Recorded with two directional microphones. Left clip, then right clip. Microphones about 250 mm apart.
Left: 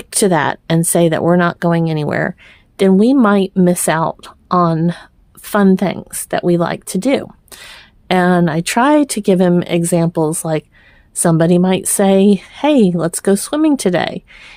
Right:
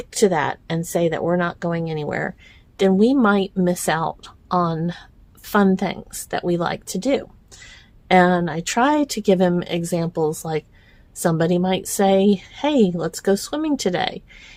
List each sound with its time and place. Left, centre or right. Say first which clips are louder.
0.1 s a woman's voice: left 5 dB; left